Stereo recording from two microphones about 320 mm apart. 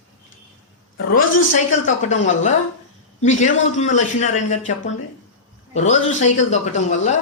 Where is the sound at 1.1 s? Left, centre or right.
Left.